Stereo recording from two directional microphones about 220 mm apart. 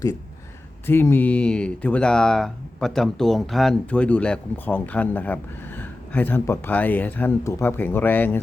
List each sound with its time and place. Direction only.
0.9 s speech: 10° left (ahead or behind)